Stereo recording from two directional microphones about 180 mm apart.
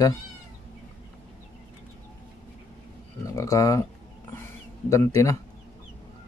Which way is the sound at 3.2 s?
20° left (ahead or behind).